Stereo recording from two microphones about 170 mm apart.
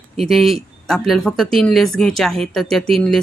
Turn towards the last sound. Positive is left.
turn(degrees=5)  # may be behind; listen again after turning